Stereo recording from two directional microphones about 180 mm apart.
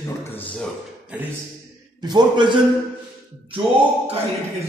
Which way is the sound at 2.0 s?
25° right (ahead or behind).